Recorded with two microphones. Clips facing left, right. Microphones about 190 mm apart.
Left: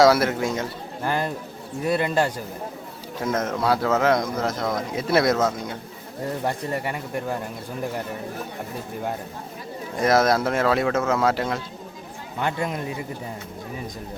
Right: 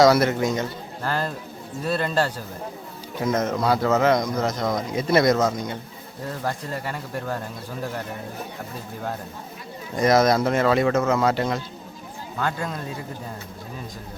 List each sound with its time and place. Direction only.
0.0 s speech: 5° left (ahead or behind)
1.0 s a man's voice: 15° left (ahead or behind)
3.2 s speech: 5° left (ahead or behind)
6.4 s speech: 20° left (ahead or behind)
9.9 s speech: 5° left (ahead or behind)
12.4 s speech: 20° left (ahead or behind)